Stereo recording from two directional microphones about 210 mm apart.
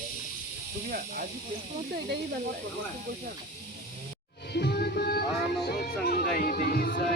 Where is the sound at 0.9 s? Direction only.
40° right (ahead or behind).